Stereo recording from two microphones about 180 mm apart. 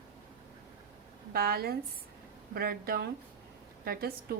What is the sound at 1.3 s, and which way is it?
A woman's voice, 60° right (ahead or behind).